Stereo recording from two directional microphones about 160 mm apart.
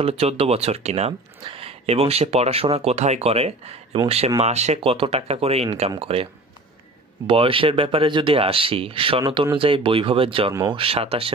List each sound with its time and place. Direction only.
0.0 s speech: 40° right (ahead or behind)
7.2 s speech: 35° right (ahead or behind)
10.5 s speech: 20° right (ahead or behind)
10.8 s speech: 35° right (ahead or behind)